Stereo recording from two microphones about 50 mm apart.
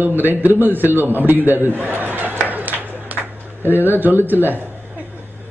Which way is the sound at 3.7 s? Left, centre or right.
Right.